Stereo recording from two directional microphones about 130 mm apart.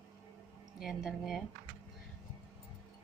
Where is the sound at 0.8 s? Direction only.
Centre (ahead or behind).